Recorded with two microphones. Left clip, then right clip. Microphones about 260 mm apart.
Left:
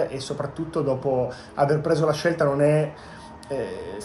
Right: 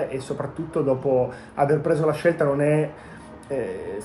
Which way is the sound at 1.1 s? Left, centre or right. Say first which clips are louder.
Right 2 dB; centre.